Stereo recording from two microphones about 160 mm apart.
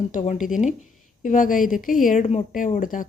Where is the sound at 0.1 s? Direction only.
50° left (ahead or behind).